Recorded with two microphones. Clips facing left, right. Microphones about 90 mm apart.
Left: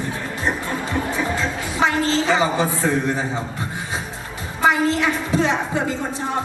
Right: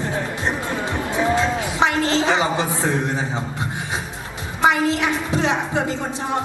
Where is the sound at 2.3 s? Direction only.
20° right (ahead or behind).